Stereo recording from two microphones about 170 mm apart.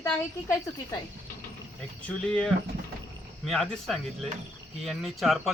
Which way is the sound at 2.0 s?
5° left (ahead or behind).